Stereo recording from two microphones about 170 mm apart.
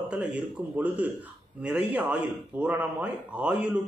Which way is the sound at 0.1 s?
5° right (ahead or behind).